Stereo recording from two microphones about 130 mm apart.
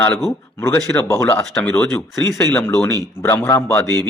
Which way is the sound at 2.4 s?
20° left (ahead or behind).